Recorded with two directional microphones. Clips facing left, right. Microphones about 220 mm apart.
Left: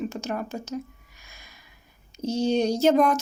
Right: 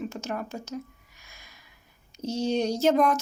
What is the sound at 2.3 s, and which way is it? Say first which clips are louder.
Speech: left 3 dB; 35° left (ahead or behind).